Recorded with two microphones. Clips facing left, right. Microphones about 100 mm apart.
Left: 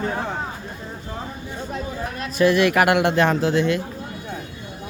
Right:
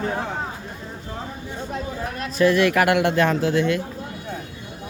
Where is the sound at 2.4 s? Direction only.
20° left (ahead or behind).